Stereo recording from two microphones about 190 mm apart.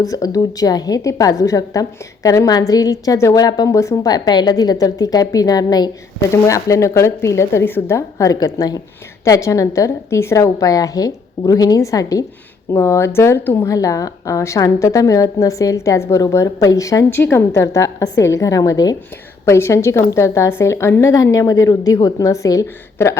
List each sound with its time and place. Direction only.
0.0 s a woman's voice: 20° left (ahead or behind)